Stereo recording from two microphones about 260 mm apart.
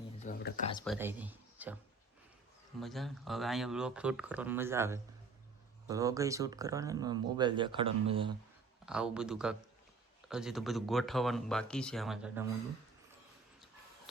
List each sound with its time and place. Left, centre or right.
0.3 s a sound: left
0.9 s speech: centre
2.8 s speech: centre; by 8.3 s right
8.9 s speech: centre